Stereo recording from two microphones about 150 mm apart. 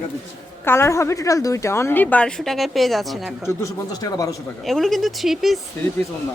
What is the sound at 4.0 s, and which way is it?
Speech, 25° left (ahead or behind).